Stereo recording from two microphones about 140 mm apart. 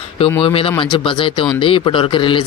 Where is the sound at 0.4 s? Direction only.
40° left (ahead or behind).